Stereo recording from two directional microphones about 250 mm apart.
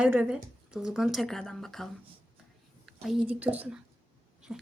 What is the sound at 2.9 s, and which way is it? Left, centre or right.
Speech, centre.